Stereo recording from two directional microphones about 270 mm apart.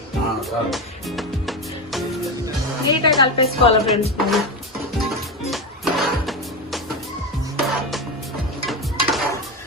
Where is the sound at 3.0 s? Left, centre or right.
Centre.